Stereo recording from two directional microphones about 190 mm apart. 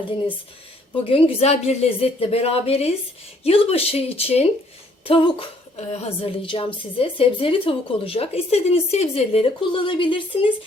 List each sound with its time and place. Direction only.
1.0 s a woman's voice: 30° left (ahead or behind)